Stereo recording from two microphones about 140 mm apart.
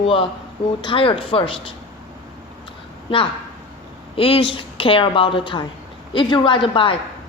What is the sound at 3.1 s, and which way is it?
A man's voice, 40° left (ahead or behind).